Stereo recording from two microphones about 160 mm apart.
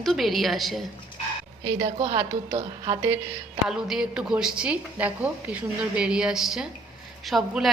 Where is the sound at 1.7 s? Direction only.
30° right (ahead or behind).